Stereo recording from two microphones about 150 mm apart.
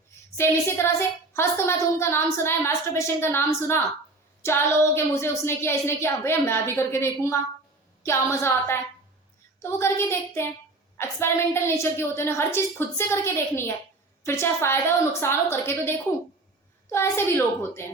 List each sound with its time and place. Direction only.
0.3 s a woman's voice: 15° left (ahead or behind)